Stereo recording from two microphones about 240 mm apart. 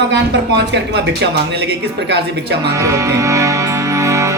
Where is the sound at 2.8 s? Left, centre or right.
Centre.